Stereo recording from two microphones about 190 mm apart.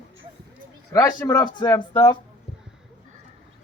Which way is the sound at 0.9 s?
15° left (ahead or behind).